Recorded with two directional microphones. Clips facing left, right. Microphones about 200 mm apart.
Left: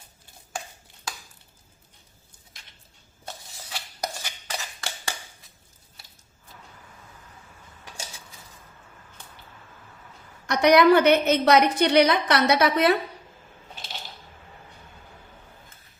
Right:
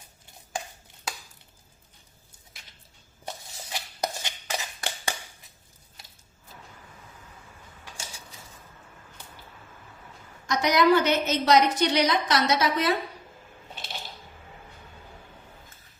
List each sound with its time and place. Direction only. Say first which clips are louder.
3.2 s dishes: right 2 dB; 20° right (ahead or behind)
10.4 s a woman's voice: left 5 dB; 65° left (ahead or behind)